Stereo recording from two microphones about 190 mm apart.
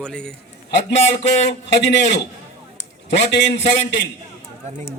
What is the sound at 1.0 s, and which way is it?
Speech, 40° left (ahead or behind).